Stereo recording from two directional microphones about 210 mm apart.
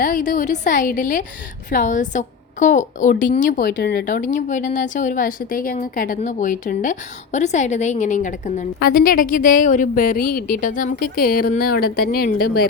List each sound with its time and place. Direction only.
0.0 s a woman's voice: 40° left (ahead or behind)